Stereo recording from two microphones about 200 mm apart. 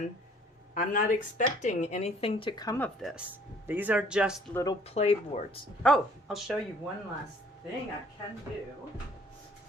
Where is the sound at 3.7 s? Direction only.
10° right (ahead or behind).